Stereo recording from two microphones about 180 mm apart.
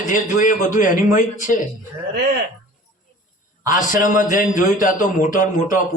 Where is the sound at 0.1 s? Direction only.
45° left (ahead or behind).